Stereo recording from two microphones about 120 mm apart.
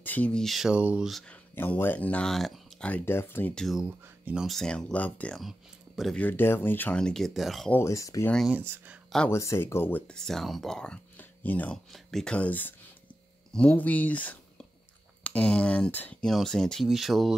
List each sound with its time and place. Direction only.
0.0 s speech: 15° left (ahead or behind)
1.3 s speech: 15° left (ahead or behind)
2.9 s speech: 20° left (ahead or behind)
3.5 s speech: centre (ahead or behind)
5.4 s speech: centre (ahead or behind)
6.1 s speech: 15° left (ahead or behind); by 7.7 s centre (ahead or behind)
7.7 s speech: 25° left (ahead or behind)
8.5 s speech: 15° right (ahead or behind)
9.3 s speech: 25° left (ahead or behind); by 17.4 s centre (ahead or behind)